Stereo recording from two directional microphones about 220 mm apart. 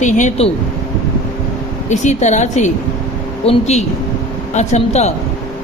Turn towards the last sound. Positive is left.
turn(degrees=30)  # may be behind; listen again after turning